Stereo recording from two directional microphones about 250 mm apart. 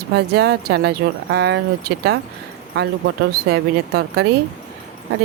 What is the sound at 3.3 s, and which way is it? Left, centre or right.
Speech, right.